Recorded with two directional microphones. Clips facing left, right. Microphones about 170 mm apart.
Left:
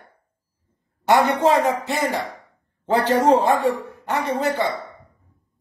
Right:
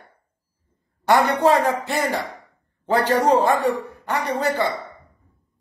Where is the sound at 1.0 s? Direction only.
20° left (ahead or behind).